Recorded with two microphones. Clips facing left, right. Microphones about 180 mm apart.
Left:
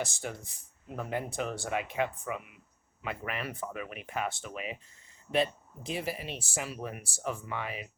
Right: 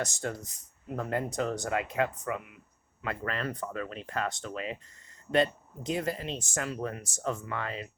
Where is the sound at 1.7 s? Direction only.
90° right.